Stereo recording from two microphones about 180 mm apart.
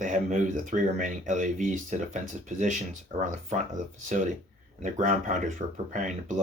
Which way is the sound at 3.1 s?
30° right (ahead or behind).